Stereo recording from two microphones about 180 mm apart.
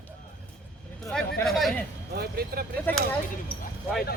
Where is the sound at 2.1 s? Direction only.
55° right (ahead or behind).